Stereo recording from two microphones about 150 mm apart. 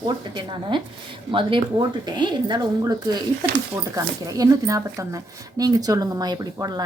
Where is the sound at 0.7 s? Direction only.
30° right (ahead or behind).